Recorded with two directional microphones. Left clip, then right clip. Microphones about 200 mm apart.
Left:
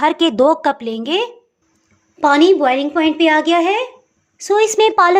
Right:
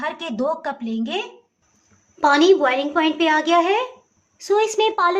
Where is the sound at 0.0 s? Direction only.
55° left (ahead or behind).